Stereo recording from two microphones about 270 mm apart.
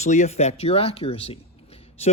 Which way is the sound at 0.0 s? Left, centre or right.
Left.